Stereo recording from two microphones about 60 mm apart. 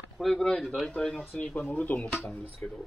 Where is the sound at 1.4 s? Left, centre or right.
Left.